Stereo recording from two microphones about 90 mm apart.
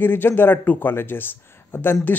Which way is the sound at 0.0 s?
20° left (ahead or behind).